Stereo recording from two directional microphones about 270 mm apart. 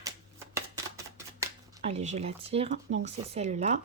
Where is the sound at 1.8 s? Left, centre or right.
Right.